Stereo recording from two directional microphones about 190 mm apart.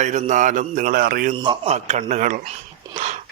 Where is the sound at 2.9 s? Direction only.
35° right (ahead or behind).